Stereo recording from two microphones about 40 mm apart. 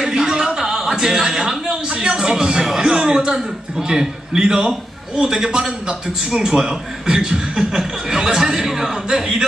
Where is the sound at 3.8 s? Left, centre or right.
Centre.